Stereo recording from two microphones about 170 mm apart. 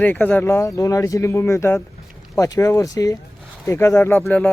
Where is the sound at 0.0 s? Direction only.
10° left (ahead or behind).